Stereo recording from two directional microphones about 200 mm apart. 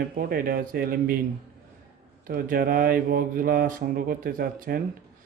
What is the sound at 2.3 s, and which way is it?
Speech, 45° right (ahead or behind).